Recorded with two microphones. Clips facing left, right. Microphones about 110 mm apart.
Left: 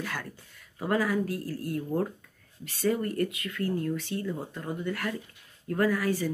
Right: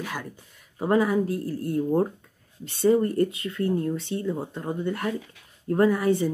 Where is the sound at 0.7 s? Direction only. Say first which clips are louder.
Right 5 dB; 25° right (ahead or behind).